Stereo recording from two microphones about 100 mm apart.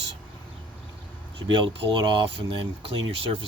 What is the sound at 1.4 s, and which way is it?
Speech, 55° right (ahead or behind).